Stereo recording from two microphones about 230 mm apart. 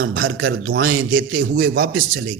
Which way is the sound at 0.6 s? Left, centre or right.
Right.